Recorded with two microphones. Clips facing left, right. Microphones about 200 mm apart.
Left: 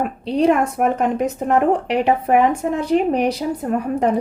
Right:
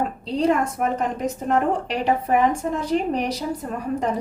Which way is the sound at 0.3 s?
65° left (ahead or behind).